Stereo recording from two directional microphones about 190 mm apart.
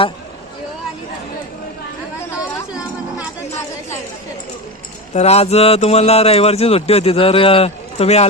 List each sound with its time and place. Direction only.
5.1 s a man's voice: 35° left (ahead or behind)